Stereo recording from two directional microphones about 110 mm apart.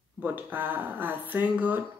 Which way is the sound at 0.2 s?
20° right (ahead or behind).